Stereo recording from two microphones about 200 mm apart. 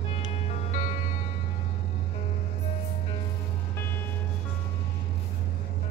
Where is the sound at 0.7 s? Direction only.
35° left (ahead or behind).